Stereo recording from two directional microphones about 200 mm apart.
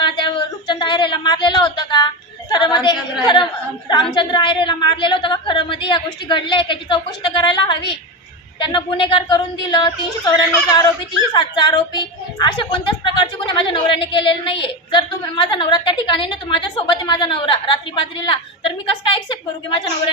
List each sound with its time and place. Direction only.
0.0 s a sound: 25° left (ahead or behind)
2.5 s a woman's voice: 20° left (ahead or behind)
4.1 s a woman's voice: 25° left (ahead or behind)